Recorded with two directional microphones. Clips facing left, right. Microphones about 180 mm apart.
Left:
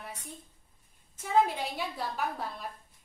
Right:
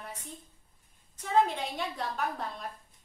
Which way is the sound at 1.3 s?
5° left (ahead or behind).